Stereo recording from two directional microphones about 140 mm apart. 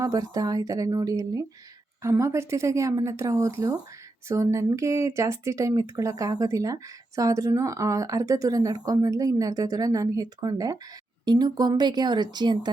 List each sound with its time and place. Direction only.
0.0 s speech: 25° right (ahead or behind)